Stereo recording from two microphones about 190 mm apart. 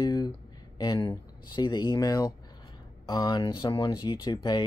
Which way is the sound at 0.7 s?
20° left (ahead or behind).